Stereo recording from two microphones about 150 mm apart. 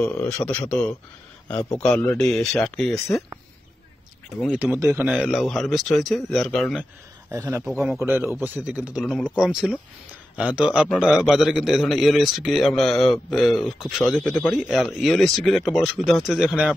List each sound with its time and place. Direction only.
0.0 s a man's voice: 10° left (ahead or behind)
4.4 s a man's voice: 10° right (ahead or behind)
7.2 s a man's voice: 20° right (ahead or behind)
7.6 s a man's voice: centre (ahead or behind)
8.0 s a man's voice: 15° right (ahead or behind)